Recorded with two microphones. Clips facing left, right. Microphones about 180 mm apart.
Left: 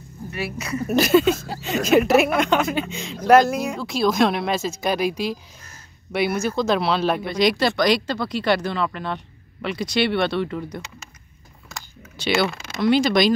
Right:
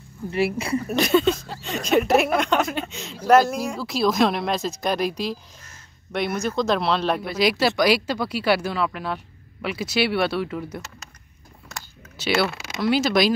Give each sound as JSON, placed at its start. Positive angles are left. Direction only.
{"t": 0.3, "sound": "speech", "side_deg": -30}
{"t": 0.8, "sound": "speech", "side_deg": 5}